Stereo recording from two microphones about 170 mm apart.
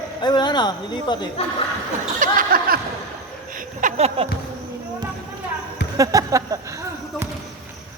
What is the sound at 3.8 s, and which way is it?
Speech, 40° right (ahead or behind).